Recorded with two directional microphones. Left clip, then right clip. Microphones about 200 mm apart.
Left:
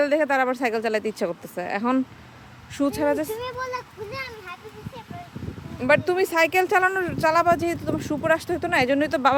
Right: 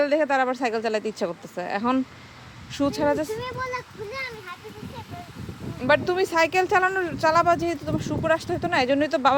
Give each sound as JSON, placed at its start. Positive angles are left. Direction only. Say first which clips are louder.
{"t": 0.0, "sound": "speech", "louder": "left 1 dB", "side_deg": 10}
{"t": 5.8, "sound": "speech", "louder": "left 1 dB", "side_deg": 5}